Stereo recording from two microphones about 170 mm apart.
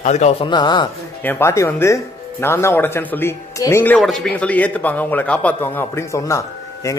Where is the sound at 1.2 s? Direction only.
15° left (ahead or behind).